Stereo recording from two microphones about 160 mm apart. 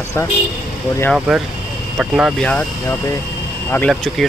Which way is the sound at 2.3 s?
5° left (ahead or behind).